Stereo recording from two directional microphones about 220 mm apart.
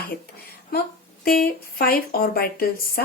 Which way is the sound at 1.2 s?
40° left (ahead or behind).